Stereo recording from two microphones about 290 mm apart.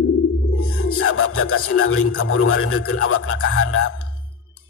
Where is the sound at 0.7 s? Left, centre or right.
Left.